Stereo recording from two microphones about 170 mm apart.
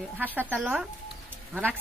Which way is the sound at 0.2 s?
10° right (ahead or behind).